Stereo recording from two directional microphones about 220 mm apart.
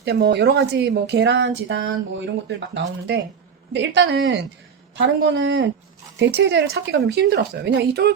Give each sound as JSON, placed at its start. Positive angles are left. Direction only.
{"t": 0.0, "sound": "a woman's voice", "side_deg": -50}